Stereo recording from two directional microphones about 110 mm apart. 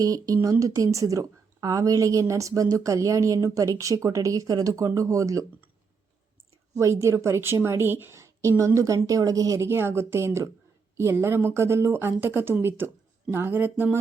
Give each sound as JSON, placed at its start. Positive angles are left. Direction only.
{"t": 0.0, "sound": "a woman's voice", "side_deg": -30}
{"t": 6.7, "sound": "a woman's voice", "side_deg": -25}